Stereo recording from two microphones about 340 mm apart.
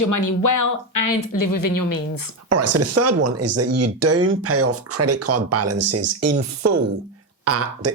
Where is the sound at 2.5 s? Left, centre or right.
Right.